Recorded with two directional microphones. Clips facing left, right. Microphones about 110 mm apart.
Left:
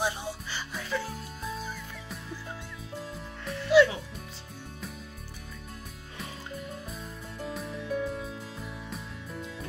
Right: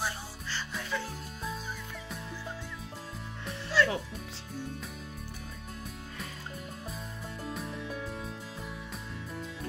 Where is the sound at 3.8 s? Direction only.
15° left (ahead or behind).